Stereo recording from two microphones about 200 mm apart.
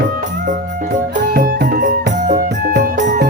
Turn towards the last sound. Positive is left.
turn(degrees=-40)  # may be behind; listen again after turning